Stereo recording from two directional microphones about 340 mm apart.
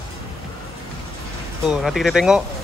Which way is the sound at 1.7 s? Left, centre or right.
Centre.